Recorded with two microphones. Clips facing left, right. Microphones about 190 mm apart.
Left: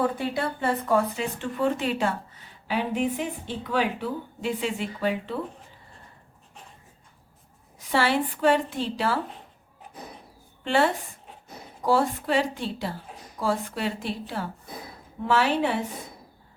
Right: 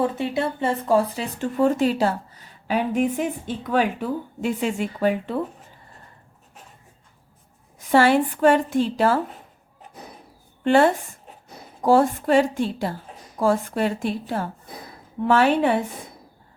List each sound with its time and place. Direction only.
0.0 s speech: 25° right (ahead or behind); by 5.4 s 50° right (ahead or behind)
7.8 s speech: 50° right (ahead or behind)
10.6 s a woman's voice: 50° right (ahead or behind)